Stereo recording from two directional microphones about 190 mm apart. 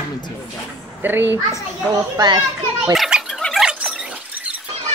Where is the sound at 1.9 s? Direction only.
20° right (ahead or behind).